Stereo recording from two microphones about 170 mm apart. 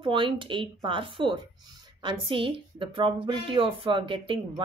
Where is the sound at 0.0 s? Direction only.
30° right (ahead or behind).